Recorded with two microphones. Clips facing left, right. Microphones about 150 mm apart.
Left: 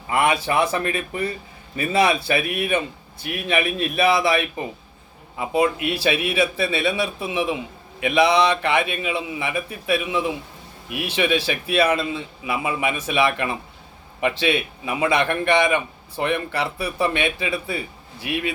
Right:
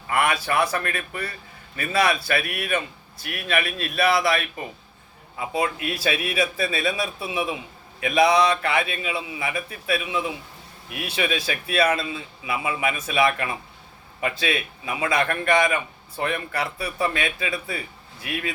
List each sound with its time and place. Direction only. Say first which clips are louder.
0.1 s a man's voice: left 3 dB; 20° left (ahead or behind)
11.1 s a man's voice: left 4 dB; 30° left (ahead or behind)